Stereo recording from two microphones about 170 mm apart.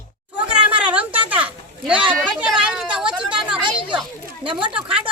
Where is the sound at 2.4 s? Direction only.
5° right (ahead or behind).